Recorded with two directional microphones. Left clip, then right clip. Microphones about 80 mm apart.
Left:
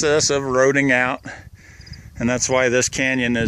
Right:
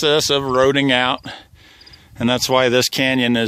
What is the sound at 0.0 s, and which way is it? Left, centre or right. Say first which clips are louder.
Speech: right 2 dB; centre.